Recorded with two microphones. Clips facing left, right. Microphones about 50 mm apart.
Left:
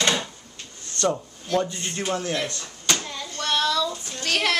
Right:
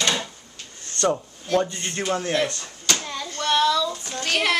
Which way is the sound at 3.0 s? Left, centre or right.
Centre.